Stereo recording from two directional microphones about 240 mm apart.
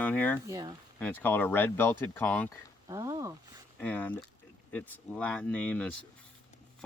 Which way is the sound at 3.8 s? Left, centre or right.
Centre.